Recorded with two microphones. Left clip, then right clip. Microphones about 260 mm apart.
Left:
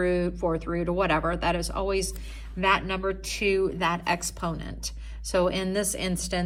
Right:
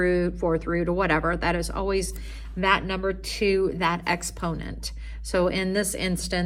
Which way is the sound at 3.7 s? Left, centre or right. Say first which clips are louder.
Right 1 dB; centre.